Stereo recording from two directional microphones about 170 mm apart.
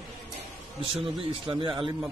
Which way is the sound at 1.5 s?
30° right (ahead or behind).